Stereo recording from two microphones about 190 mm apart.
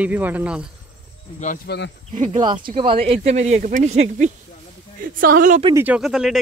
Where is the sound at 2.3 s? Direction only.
25° right (ahead or behind).